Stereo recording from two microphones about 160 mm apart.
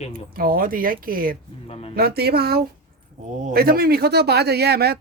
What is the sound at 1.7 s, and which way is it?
Speech, 40° left (ahead or behind).